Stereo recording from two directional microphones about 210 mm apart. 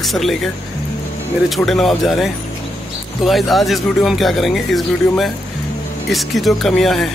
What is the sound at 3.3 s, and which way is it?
Speech, centre (ahead or behind).